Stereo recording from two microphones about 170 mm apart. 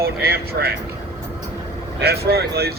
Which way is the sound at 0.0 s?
65° right (ahead or behind).